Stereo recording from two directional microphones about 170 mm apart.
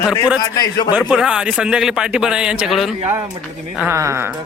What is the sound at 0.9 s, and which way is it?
A man's voice, 5° right (ahead or behind).